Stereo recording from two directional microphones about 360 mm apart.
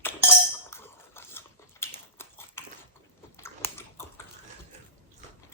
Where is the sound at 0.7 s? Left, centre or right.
Centre.